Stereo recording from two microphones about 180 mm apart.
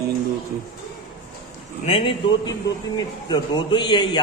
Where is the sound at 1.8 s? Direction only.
30° left (ahead or behind).